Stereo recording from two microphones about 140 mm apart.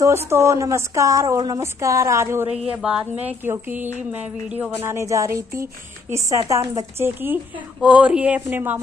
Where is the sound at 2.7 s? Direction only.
10° right (ahead or behind).